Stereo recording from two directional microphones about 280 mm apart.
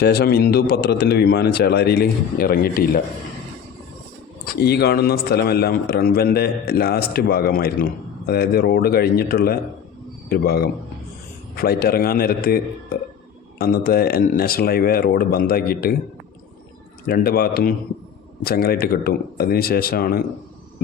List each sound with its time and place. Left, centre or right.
0.0 s a man's voice: left
4.4 s a man's voice: left
17.1 s a man's voice: left